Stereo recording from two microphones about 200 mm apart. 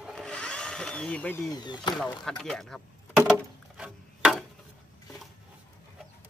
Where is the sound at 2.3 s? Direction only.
5° left (ahead or behind).